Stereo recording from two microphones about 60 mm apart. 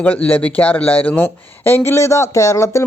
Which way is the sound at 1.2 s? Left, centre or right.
Left.